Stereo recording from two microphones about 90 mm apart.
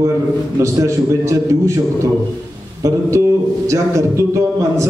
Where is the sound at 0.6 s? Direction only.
35° right (ahead or behind).